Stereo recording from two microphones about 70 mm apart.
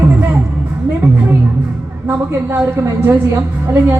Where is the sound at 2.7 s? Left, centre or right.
Right.